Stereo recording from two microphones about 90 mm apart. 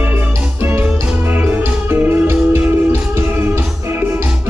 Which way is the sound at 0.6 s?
25° right (ahead or behind).